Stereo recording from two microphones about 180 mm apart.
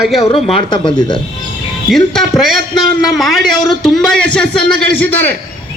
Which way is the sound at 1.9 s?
Centre (ahead or behind).